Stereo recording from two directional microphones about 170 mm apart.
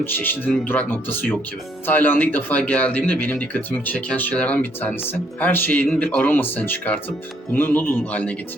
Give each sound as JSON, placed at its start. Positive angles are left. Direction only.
{"t": 0.0, "sound": "speech", "side_deg": 10}